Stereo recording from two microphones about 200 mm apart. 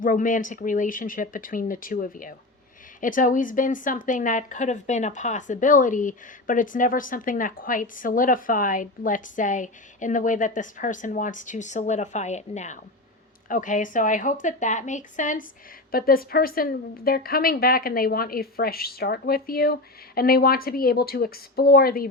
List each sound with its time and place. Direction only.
0.0 s a woman's voice: 40° left (ahead or behind)